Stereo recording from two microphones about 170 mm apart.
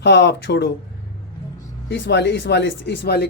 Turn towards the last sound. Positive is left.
turn(degrees=75)  # may be behind; listen again after turning